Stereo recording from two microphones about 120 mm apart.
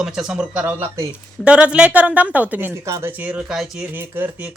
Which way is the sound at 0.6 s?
20° right (ahead or behind).